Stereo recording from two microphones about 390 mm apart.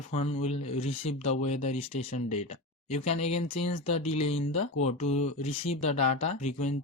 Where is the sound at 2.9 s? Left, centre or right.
Centre.